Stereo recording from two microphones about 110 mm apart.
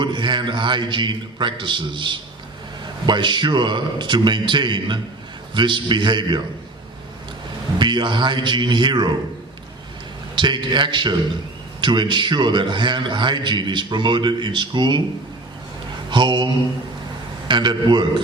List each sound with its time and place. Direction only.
0.0 s a man's voice: 45° right (ahead or behind)
7.8 s a man's voice: 45° right (ahead or behind)
10.3 s a man's voice: 45° right (ahead or behind)
16.0 s speech: 45° right (ahead or behind)
17.5 s a man's voice: 45° right (ahead or behind)